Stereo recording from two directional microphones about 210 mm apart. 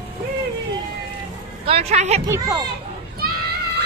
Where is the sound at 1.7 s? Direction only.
30° right (ahead or behind).